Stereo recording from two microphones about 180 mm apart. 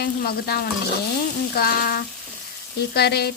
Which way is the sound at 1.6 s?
55° left (ahead or behind).